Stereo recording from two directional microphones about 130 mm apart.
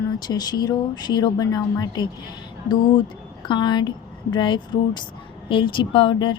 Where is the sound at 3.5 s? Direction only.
35° left (ahead or behind).